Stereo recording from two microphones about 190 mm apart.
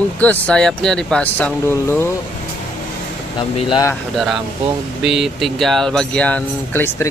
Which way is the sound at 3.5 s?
25° left (ahead or behind).